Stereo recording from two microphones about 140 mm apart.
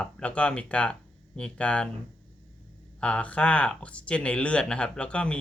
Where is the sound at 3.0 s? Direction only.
10° left (ahead or behind).